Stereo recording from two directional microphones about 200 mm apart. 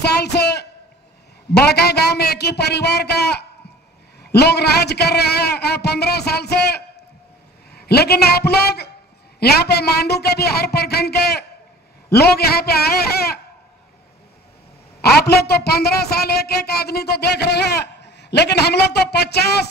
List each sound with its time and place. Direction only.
0.0 s a sound: 55° left (ahead or behind)
1.7 s a man's voice: 55° left (ahead or behind)
15.0 s a man's voice: 50° left (ahead or behind)